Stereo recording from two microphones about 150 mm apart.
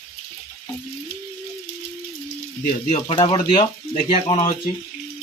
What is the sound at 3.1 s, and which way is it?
Speech, 35° left (ahead or behind).